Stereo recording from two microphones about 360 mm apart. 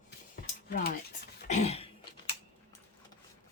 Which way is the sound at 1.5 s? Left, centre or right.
Centre.